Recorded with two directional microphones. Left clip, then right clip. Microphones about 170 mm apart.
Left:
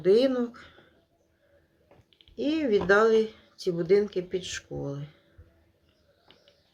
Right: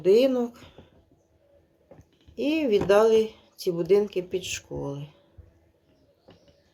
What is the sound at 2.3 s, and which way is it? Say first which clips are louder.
Speech: right 2 dB; 15° left (ahead or behind).